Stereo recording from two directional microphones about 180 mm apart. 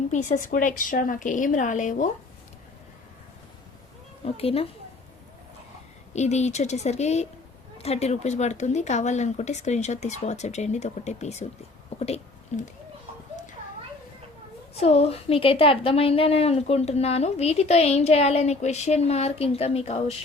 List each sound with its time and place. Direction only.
0.1 s a woman's voice: 40° left (ahead or behind)
4.3 s a woman's voice: 30° left (ahead or behind)
6.1 s a woman's voice: 40° left (ahead or behind)
11.9 s a sound: 35° left (ahead or behind)
14.8 s a woman's voice: 35° left (ahead or behind)